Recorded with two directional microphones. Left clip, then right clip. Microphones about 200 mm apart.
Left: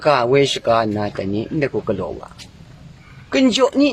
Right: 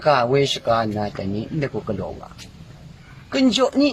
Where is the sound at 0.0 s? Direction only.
35° left (ahead or behind).